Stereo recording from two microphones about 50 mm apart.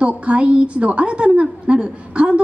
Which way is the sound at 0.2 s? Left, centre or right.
Right.